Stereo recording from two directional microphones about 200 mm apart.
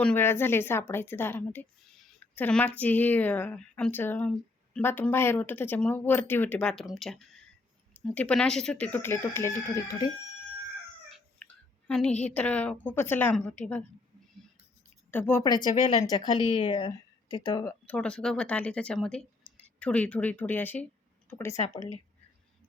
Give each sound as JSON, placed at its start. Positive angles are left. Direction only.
{"t": 0.0, "sound": "a woman's voice", "side_deg": 10}
{"t": 11.1, "sound": "a sound", "side_deg": 5}
{"t": 12.2, "sound": "a woman's voice", "side_deg": 5}
{"t": 15.1, "sound": "a woman's voice", "side_deg": 10}
{"t": 21.5, "sound": "speech", "side_deg": 35}